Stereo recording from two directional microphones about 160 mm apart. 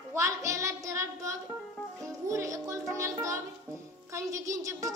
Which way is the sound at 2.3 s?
20° right (ahead or behind).